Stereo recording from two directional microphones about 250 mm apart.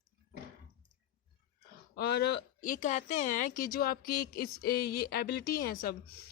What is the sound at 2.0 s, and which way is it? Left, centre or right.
Speech, left.